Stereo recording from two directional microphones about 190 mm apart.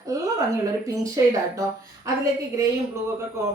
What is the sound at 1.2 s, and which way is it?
Speech, 20° right (ahead or behind).